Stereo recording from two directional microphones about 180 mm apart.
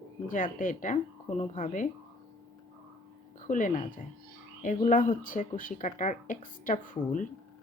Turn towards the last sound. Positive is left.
turn(degrees=45)  # may be behind; listen again after turning